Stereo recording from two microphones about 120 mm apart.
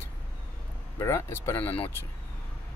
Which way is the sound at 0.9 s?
25° left (ahead or behind).